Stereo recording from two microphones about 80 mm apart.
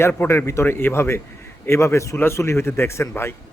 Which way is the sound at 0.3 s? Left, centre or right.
Left.